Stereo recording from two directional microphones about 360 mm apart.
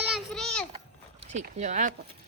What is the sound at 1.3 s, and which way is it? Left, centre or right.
Speech, centre.